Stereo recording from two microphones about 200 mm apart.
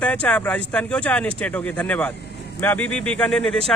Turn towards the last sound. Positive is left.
turn(degrees=5)  # may be behind; listen again after turning